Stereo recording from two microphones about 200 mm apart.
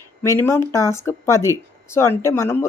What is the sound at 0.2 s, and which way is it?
Speech, 10° left (ahead or behind).